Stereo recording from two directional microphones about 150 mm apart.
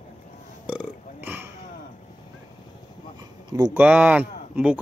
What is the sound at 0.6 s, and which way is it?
Burping, 10° right (ahead or behind).